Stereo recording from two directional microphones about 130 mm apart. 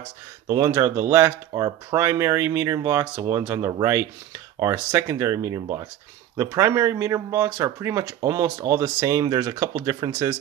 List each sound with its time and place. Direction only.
0.5 s speech: 20° right (ahead or behind)